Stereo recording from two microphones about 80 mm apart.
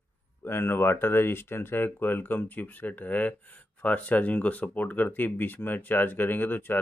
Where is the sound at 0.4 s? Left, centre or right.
Left.